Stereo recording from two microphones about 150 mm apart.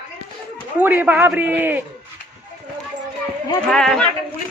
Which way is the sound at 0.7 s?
10° right (ahead or behind).